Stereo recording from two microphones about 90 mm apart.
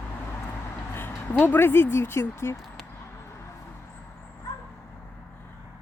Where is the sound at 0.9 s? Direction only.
25° left (ahead or behind).